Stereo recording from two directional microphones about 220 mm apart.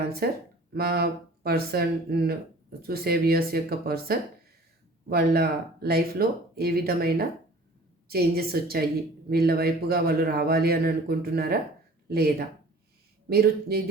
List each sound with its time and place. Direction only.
0.2 s speech: 45° right (ahead or behind)
13.3 s speech: 45° right (ahead or behind)